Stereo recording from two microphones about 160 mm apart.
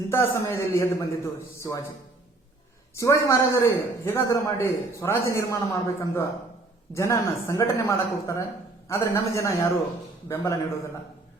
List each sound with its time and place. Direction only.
0.1 s a man's voice: 15° left (ahead or behind)
3.0 s a man's voice: 20° left (ahead or behind)